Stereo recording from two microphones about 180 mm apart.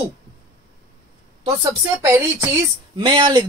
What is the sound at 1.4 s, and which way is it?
A woman's voice, 20° right (ahead or behind).